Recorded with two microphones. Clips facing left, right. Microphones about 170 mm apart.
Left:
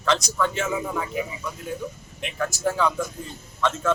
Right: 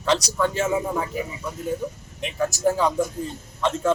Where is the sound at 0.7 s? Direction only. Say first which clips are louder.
Right 3 dB; 20° right (ahead or behind).